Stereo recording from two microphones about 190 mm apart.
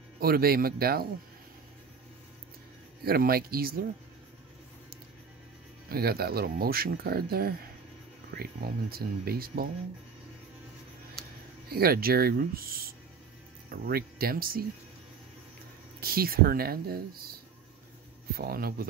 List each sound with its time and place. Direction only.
0.2 s speech: 55° right (ahead or behind)
3.0 s speech: 55° right (ahead or behind)
5.9 s speech: 55° right (ahead or behind)
11.7 s speech: 55° right (ahead or behind)
16.0 s speech: 50° right (ahead or behind)